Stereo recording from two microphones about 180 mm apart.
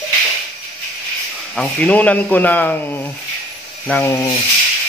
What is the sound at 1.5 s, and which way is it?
Speech, 5° left (ahead or behind).